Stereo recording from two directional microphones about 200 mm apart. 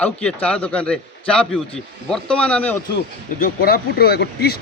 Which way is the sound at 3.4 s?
50° left (ahead or behind).